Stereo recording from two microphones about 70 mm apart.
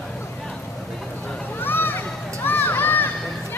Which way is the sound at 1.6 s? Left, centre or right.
Left.